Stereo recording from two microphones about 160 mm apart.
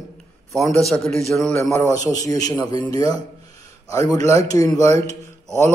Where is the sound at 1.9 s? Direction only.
20° left (ahead or behind).